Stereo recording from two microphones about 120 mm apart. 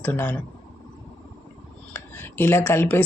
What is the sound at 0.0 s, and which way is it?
Speech, 15° left (ahead or behind).